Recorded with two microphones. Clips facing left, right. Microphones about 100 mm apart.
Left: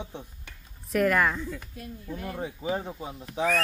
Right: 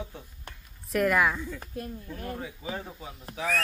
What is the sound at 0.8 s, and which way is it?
Speech, centre (ahead or behind).